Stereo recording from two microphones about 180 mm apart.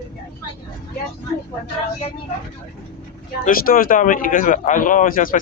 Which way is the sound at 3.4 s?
55° left (ahead or behind).